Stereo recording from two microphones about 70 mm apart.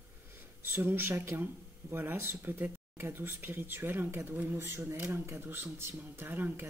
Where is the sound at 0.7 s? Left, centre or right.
Right.